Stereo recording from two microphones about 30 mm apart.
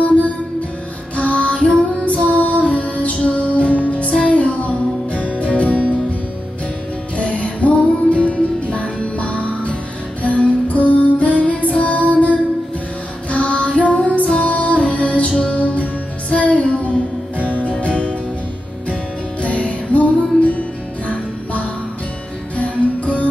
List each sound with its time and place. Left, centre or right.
0.0 s music: left
7.2 s music: left
13.3 s child singing: left
14.2 s music: left
19.9 s music: left
22.6 s music: left